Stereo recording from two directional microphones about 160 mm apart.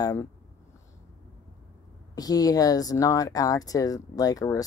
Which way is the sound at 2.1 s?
25° left (ahead or behind).